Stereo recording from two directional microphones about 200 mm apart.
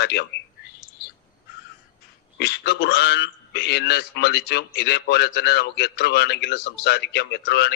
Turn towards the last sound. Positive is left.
turn(degrees=55)  # may be behind; listen again after turning